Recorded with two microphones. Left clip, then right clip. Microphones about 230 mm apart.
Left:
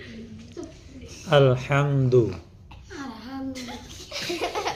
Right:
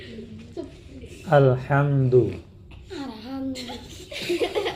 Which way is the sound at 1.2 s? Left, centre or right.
Left.